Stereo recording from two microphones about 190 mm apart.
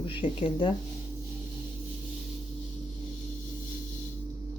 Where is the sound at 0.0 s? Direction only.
25° left (ahead or behind).